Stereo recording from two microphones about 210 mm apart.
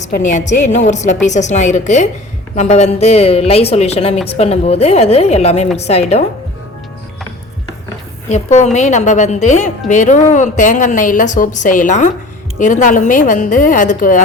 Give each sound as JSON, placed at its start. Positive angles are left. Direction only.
{"t": 0.0, "sound": "a woman's voice", "side_deg": 35}
{"t": 8.3, "sound": "a woman's voice", "side_deg": 30}